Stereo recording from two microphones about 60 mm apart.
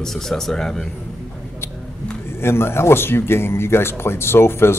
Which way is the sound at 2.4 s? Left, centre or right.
Left.